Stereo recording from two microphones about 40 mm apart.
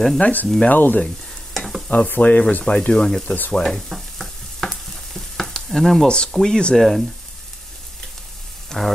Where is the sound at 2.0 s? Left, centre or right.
Left.